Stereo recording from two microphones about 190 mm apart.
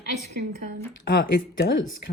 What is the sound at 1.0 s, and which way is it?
Speech, 60° left (ahead or behind).